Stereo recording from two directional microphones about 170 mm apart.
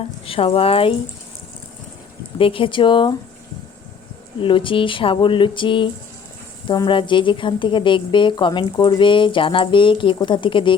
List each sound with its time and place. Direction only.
0.3 s speech: 35° left (ahead or behind)
2.4 s speech: 30° left (ahead or behind)
4.4 s speech: 30° left (ahead or behind)